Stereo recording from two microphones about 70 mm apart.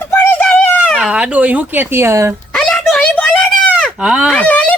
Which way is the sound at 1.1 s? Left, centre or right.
Centre.